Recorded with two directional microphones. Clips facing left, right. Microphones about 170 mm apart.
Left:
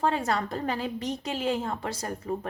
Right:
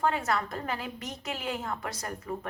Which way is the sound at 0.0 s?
30° left (ahead or behind).